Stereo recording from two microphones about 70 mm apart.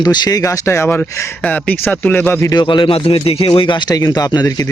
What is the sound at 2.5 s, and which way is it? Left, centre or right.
Speech, left.